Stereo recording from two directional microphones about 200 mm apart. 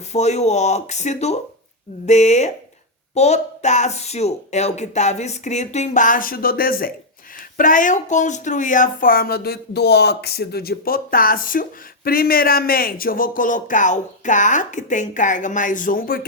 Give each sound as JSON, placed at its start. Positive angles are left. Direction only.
{"t": 0.1, "sound": "speech", "side_deg": 35}